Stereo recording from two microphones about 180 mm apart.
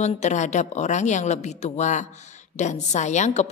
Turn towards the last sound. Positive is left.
turn(degrees=40)  # may be behind; listen again after turning